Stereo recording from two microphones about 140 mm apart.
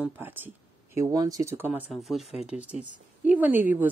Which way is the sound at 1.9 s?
Centre (ahead or behind).